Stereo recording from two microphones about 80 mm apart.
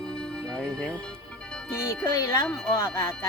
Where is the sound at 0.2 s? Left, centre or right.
Centre.